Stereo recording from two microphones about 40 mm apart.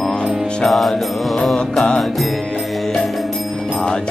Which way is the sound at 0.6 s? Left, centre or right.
Centre.